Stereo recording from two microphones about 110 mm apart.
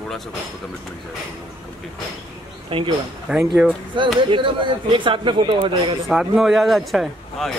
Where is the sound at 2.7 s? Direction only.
55° right (ahead or behind).